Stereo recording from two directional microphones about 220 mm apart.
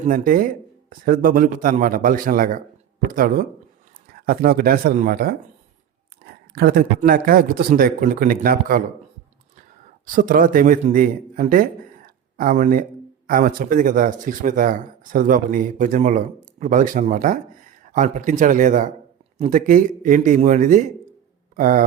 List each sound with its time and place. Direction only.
0.0 s speech: 40° right (ahead or behind)
10.1 s a man's voice: 40° right (ahead or behind)